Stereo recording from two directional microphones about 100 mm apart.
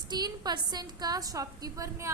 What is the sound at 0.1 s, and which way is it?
A woman's voice, 45° right (ahead or behind).